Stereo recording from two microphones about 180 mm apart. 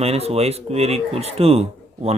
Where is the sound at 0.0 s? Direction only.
35° right (ahead or behind).